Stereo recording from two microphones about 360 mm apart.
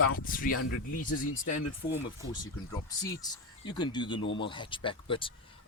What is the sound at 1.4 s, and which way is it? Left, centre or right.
Speech, left.